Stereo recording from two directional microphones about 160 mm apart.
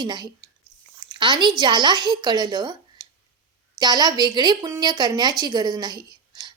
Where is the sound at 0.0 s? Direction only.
25° right (ahead or behind).